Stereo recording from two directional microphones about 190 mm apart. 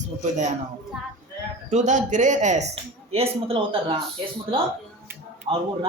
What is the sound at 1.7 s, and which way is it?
Speech, 40° right (ahead or behind).